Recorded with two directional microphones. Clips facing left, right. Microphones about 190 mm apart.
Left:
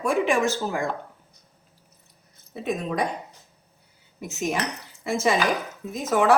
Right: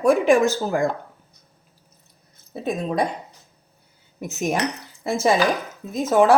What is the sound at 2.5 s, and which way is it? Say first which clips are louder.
Speech: right 3 dB; 35° right (ahead or behind).